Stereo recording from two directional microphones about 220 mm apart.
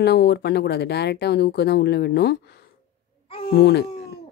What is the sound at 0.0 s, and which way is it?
Speech, 50° left (ahead or behind).